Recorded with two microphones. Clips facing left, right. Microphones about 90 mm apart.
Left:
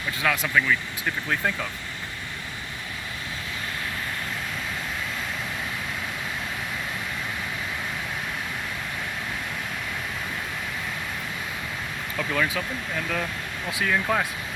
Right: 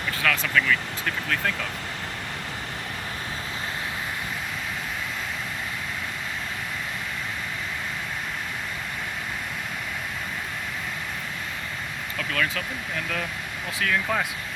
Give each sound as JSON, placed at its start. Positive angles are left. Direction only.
{"t": 0.2, "sound": "speech", "side_deg": 15}
{"t": 12.1, "sound": "speech", "side_deg": 10}